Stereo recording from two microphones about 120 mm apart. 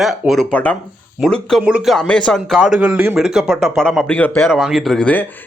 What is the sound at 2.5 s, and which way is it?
Speech, 10° right (ahead or behind).